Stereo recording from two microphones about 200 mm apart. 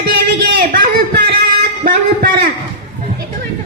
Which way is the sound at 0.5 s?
45° right (ahead or behind).